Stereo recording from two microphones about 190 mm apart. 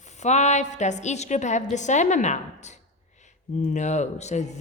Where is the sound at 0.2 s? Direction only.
35° left (ahead or behind).